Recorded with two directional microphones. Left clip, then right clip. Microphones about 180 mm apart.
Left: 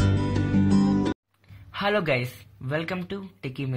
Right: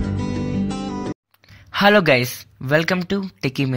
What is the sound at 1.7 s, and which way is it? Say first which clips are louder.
Speech: right 10 dB; 45° right (ahead or behind).